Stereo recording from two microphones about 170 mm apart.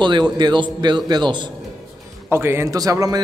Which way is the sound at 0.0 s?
25° right (ahead or behind).